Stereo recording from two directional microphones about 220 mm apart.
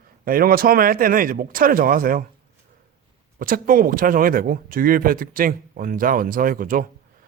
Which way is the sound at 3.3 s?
40° right (ahead or behind).